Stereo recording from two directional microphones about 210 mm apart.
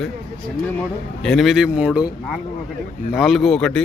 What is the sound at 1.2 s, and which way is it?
Speech, centre (ahead or behind).